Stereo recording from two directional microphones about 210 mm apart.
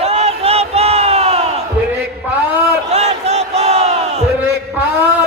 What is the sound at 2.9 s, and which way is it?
Crowd, 30° right (ahead or behind).